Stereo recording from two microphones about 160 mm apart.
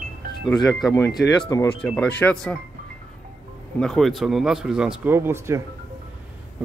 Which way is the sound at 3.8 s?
Centre (ahead or behind).